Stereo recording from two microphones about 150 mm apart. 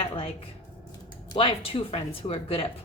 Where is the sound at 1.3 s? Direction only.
35° left (ahead or behind).